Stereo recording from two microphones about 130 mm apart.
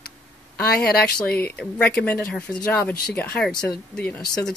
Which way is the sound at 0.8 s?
10° left (ahead or behind).